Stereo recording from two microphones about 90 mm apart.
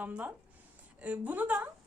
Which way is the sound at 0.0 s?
20° right (ahead or behind).